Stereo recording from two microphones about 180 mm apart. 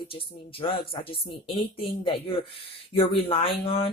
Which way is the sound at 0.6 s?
30° left (ahead or behind).